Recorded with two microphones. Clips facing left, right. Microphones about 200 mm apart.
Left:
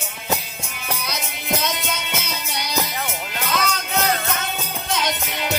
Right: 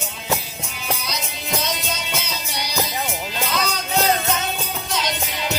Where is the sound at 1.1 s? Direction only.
55° left (ahead or behind).